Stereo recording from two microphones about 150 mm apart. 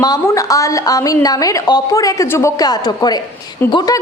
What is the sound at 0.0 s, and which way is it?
A woman's voice, 25° left (ahead or behind).